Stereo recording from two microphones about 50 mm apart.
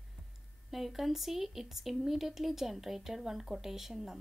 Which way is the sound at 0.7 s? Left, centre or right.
Centre.